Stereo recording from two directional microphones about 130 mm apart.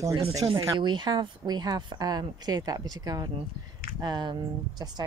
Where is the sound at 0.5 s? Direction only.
40° right (ahead or behind).